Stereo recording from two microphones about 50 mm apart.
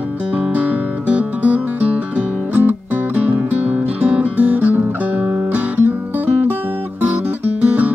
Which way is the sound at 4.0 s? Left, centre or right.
Right.